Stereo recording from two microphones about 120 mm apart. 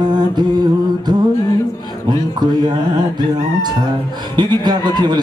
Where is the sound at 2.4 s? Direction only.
35° right (ahead or behind).